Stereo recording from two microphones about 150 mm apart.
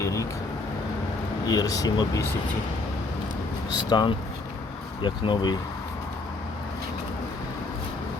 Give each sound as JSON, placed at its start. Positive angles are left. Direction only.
{"t": 0.0, "sound": "vehicle", "side_deg": 20}
{"t": 1.5, "sound": "speech", "side_deg": 25}
{"t": 3.7, "sound": "speech", "side_deg": 30}